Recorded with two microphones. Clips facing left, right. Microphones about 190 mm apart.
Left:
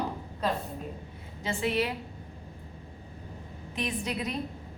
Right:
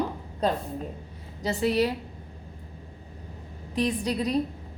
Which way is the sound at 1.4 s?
35° right (ahead or behind).